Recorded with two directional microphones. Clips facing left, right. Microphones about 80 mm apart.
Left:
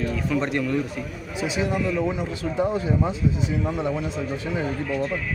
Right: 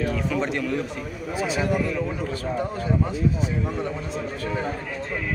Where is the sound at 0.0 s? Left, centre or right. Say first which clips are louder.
Even; centre.